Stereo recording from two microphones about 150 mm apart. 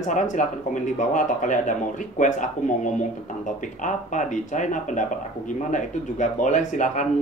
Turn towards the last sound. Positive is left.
turn(degrees=55)  # may be behind; listen again after turning